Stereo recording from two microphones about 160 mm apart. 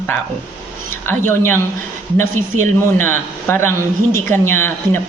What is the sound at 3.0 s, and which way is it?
A woman's voice, 15° left (ahead or behind).